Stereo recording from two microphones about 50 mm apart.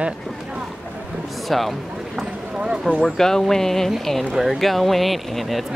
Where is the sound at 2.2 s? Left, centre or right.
Centre.